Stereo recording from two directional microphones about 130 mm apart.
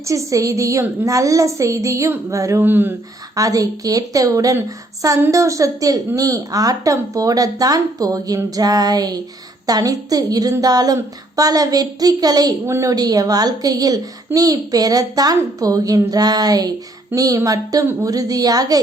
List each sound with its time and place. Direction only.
0.0 s a woman's voice: 25° right (ahead or behind)
3.3 s a woman's voice: 25° right (ahead or behind)